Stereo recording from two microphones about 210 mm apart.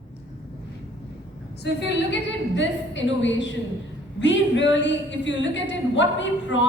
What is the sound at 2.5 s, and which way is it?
A woman's voice, 60° left (ahead or behind).